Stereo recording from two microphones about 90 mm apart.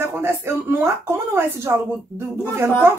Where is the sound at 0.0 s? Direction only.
25° right (ahead or behind).